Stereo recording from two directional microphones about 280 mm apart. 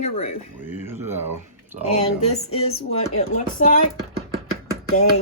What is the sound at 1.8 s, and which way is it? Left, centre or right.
Speech, left.